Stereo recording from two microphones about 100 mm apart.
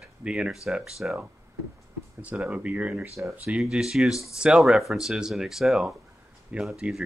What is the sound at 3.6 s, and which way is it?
Speech, 5° right (ahead or behind).